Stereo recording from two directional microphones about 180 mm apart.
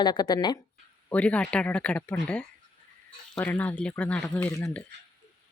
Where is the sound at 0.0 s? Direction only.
20° left (ahead or behind).